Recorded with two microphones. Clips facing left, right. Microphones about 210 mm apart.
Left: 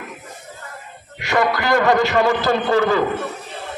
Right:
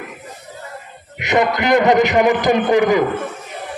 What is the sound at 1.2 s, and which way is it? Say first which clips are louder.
A man's voice: right 3 dB; 20° right (ahead or behind).